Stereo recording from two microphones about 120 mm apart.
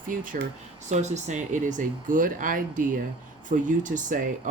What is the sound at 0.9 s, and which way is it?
Speech, 75° right (ahead or behind).